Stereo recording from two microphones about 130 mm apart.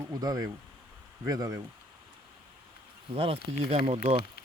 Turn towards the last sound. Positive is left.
turn(degrees=-50)  # may be behind; listen again after turning